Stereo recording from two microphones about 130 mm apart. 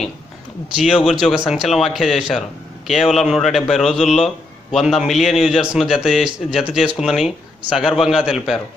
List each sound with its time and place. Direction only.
0.8 s a man's voice: centre (ahead or behind)